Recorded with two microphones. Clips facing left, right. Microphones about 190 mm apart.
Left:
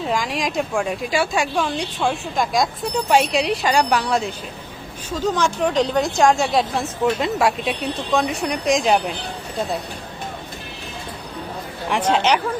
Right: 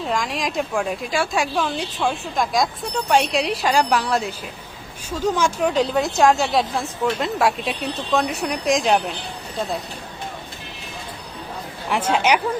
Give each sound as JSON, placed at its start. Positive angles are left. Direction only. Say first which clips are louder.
{"t": 0.0, "sound": "speech", "louder": "left 1 dB", "side_deg": 0}
{"t": 11.9, "sound": "speech", "louder": "left 1 dB", "side_deg": -5}